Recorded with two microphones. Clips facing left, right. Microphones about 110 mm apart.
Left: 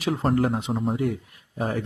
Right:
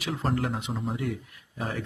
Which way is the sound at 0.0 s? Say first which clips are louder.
Left 6 dB; 45° left (ahead or behind).